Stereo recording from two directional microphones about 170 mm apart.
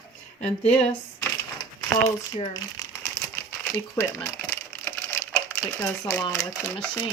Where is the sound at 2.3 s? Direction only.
25° left (ahead or behind).